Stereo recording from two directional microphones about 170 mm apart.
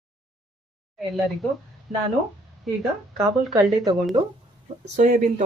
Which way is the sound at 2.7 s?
Centre (ahead or behind).